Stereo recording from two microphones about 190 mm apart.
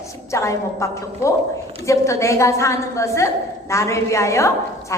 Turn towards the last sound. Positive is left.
turn(degrees=15)  # may be behind; listen again after turning